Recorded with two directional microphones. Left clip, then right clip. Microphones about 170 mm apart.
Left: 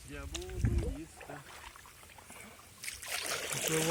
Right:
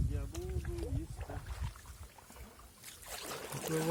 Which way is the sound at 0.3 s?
15° left (ahead or behind).